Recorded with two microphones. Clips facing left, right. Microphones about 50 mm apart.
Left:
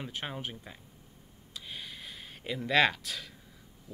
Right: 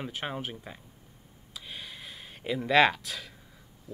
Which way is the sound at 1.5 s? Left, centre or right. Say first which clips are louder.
Right 1 dB; centre.